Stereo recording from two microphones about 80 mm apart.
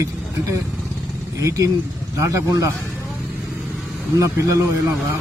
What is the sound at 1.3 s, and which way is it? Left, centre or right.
A man's voice, right.